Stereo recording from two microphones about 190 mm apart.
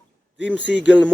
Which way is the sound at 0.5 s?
70° left (ahead or behind).